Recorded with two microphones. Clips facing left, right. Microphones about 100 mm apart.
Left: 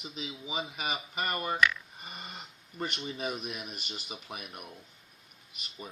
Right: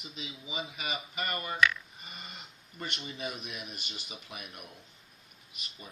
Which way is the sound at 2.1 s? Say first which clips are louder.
Left 4 dB; 40° left (ahead or behind).